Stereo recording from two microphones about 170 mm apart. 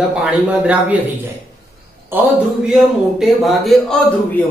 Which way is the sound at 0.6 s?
5° right (ahead or behind).